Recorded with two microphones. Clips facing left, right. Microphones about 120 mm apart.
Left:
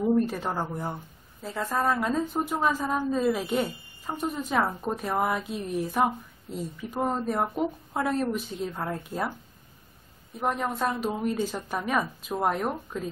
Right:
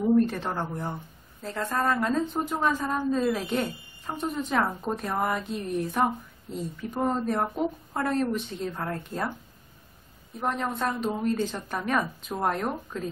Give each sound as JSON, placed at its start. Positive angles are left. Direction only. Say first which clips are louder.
{"t": 0.0, "sound": "a woman's voice", "louder": "right 2 dB", "side_deg": 5}
{"t": 10.3, "sound": "a woman's voice", "louder": "left 1 dB", "side_deg": 5}